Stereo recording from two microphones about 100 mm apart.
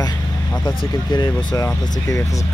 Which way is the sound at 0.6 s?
45° left (ahead or behind).